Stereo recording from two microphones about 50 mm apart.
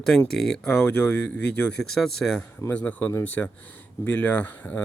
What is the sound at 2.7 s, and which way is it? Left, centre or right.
Speech, left.